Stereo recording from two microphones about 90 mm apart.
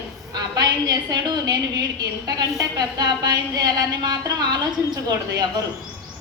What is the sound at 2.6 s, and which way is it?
A woman's voice, 45° right (ahead or behind).